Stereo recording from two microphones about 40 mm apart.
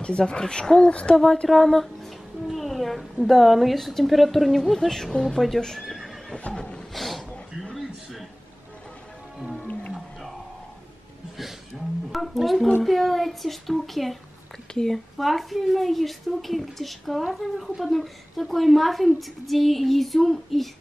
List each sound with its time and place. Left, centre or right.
0.2 s speech: centre
1.1 s a woman's voice: centre
4.7 s speech: centre
5.8 s neigh: centre
6.3 s neigh: left
6.9 s a sound: centre
12.1 s music: centre
12.8 s a woman's voice: centre
14.7 s speech: centre
15.1 s a woman's voice: centre